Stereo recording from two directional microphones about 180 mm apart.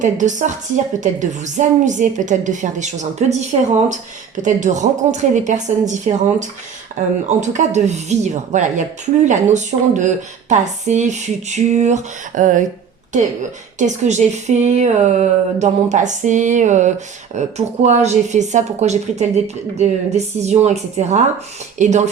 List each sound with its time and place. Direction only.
0.0 s a woman's voice: 45° right (ahead or behind)
13.7 s speech: 40° right (ahead or behind)